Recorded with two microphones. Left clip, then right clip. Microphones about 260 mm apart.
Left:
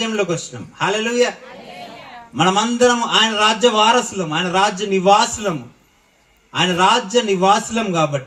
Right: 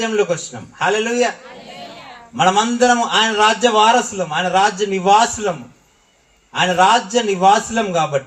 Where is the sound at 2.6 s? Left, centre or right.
Left.